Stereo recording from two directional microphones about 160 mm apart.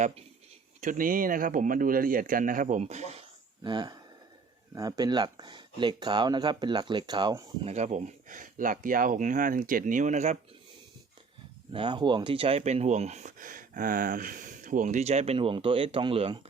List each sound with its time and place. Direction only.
0.8 s speech: 55° right (ahead or behind)
3.6 s speech: 25° right (ahead or behind)
7.6 s speech: 45° right (ahead or behind)
11.7 s speech: 30° right (ahead or behind)